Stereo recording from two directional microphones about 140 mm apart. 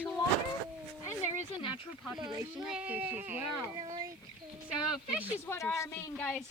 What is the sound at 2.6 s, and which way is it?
Speech, 5° right (ahead or behind).